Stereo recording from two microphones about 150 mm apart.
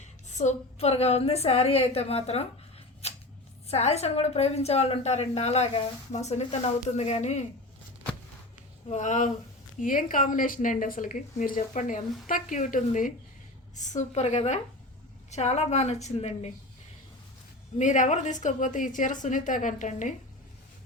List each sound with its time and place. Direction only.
0.0 s a woman's voice: 50° left (ahead or behind)
3.0 s shuffling cards: 45° left (ahead or behind)
3.7 s a woman's voice: 45° left (ahead or behind)
8.9 s a woman's voice: 55° left (ahead or behind)
17.7 s a woman's voice: 55° left (ahead or behind)